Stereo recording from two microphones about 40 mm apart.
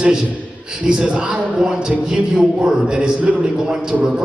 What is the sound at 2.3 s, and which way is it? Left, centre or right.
Speech, centre.